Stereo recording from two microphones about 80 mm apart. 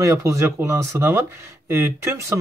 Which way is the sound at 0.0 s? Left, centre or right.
Right.